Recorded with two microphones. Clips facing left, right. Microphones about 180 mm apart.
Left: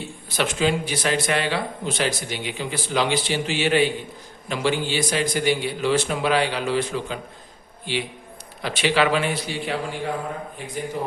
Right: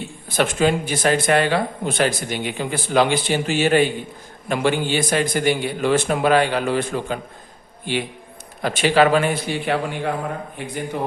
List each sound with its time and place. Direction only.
0.3 s a man's voice: 50° right (ahead or behind)